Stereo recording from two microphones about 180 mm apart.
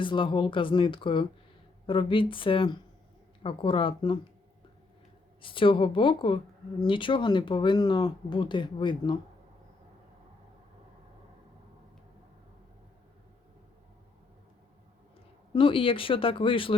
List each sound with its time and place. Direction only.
0.0 s speech: 25° left (ahead or behind)
5.4 s speech: 30° left (ahead or behind)
15.5 s speech: 30° left (ahead or behind)